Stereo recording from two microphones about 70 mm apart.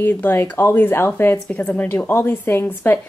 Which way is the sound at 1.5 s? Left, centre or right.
Left.